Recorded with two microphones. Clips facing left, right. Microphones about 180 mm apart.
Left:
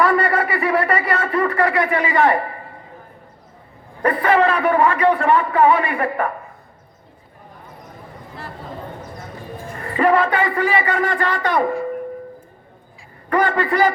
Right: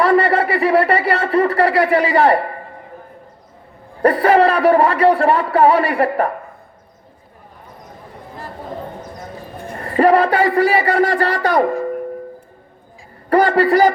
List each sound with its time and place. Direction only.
0.0 s speech: 30° right (ahead or behind)
4.0 s a man's voice: 35° right (ahead or behind)
9.7 s a man's voice: 40° right (ahead or behind)
13.3 s a man's voice: 35° right (ahead or behind)